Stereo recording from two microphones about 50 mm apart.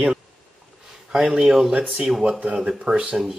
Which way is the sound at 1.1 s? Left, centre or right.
Centre.